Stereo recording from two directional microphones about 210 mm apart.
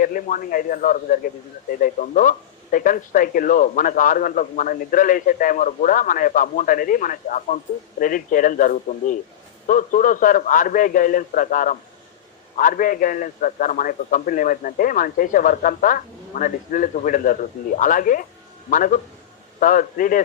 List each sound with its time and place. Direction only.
0.0 s a man's voice: 40° left (ahead or behind)